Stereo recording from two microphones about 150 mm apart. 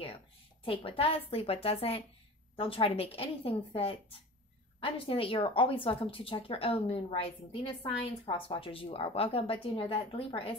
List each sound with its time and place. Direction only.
0.7 s a woman's voice: 40° left (ahead or behind)